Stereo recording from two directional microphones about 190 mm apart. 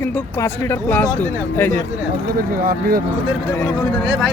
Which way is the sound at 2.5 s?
50° right (ahead or behind).